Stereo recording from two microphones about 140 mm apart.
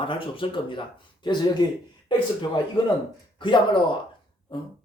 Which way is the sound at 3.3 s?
35° left (ahead or behind).